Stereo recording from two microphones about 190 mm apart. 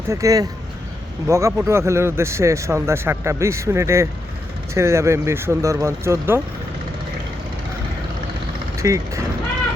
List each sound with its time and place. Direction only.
0.1 s speech: 15° right (ahead or behind)
8.7 s speech: 15° right (ahead or behind)